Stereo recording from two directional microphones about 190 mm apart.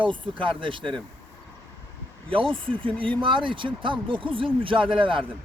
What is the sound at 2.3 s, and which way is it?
Speech, 25° right (ahead or behind).